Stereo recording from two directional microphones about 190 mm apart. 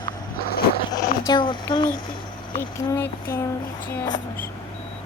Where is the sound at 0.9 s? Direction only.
25° left (ahead or behind).